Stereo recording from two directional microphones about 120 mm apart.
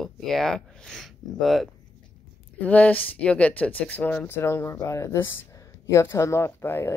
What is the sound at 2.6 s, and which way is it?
Speech, 10° left (ahead or behind).